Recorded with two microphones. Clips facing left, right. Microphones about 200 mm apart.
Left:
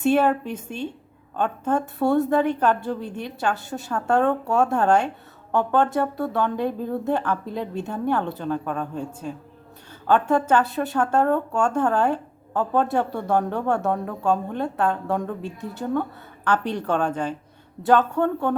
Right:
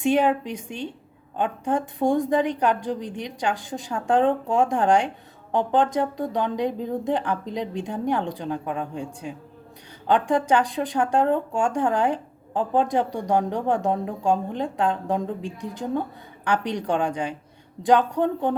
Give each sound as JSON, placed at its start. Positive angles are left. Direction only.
{"t": 0.0, "sound": "speech", "side_deg": -15}
{"t": 15.4, "sound": "a woman's voice", "side_deg": -90}
{"t": 15.8, "sound": "speech", "side_deg": -15}
{"t": 18.1, "sound": "speech", "side_deg": -15}